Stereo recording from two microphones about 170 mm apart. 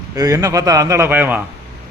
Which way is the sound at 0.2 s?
20° right (ahead or behind).